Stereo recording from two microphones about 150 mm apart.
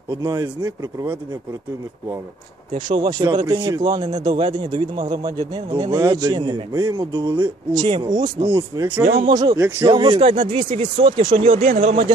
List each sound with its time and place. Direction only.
0.1 s speech: 25° right (ahead or behind)
2.9 s speech: 30° right (ahead or behind)
8.5 s speech: 15° right (ahead or behind)
9.0 s speech: 40° right (ahead or behind)
9.3 s speech: 25° right (ahead or behind)